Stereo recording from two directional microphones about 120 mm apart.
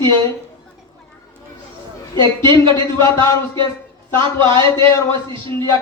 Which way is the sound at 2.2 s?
40° right (ahead or behind).